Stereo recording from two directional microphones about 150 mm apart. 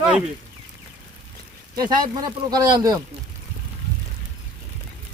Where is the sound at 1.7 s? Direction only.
25° right (ahead or behind).